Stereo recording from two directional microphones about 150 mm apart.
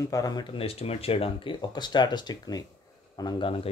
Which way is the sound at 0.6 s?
40° left (ahead or behind).